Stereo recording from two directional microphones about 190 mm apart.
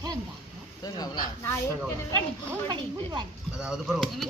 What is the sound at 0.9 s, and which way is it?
Speech, 20° left (ahead or behind).